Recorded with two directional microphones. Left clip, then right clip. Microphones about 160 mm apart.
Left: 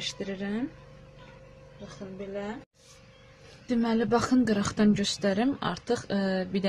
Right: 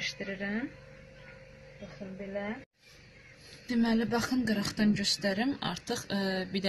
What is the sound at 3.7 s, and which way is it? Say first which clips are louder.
Speech: left 4 dB; 45° left (ahead or behind).